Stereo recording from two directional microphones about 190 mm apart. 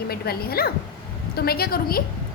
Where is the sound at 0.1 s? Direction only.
55° left (ahead or behind).